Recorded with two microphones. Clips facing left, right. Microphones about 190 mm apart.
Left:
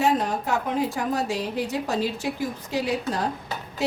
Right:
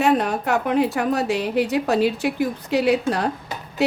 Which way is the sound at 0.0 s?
65° right (ahead or behind).